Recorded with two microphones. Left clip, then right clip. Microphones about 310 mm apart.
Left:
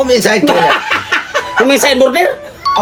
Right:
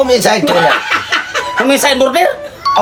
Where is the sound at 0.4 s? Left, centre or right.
Centre.